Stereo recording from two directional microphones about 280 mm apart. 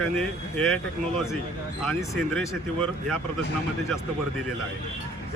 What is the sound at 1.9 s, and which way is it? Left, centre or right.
Speech, centre.